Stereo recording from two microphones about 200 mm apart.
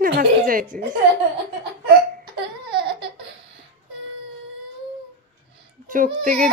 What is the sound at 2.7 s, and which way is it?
Laughter, 25° right (ahead or behind).